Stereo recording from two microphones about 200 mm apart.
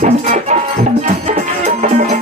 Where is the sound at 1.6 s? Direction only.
40° right (ahead or behind).